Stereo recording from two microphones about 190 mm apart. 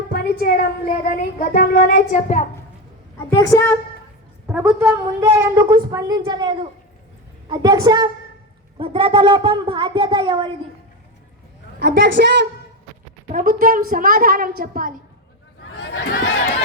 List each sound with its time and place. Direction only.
0.1 s speech: 55° left (ahead or behind)
3.2 s a woman's voice: 15° left (ahead or behind)
4.4 s a woman's voice: 10° right (ahead or behind); by 10.5 s 25° right (ahead or behind)
11.8 s a woman's voice: 60° right (ahead or behind)
13.2 s a woman's voice: 45° right (ahead or behind)
15.8 s crowd: 65° left (ahead or behind)